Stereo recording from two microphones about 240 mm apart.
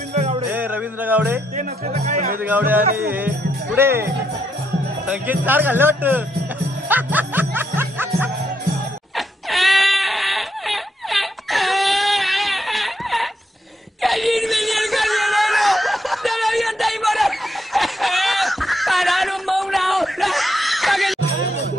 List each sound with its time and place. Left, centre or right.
0.1 s music: right
0.5 s jingle bell: centre
1.6 s speech: right
2.4 s speech: centre
6.9 s music: centre
9.1 s crying: centre
14.0 s wail: centre
17.7 s a sound: centre